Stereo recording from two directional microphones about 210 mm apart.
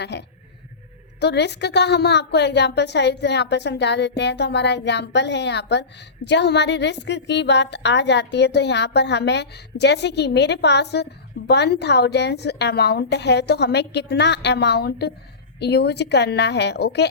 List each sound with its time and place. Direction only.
0.0 s a woman's voice: 55° left (ahead or behind)